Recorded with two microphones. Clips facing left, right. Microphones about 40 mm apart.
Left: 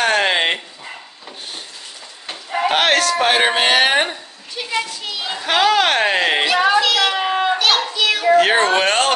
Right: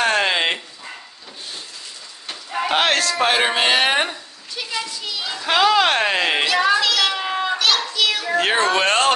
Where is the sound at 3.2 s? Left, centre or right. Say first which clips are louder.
Left 2 dB; left.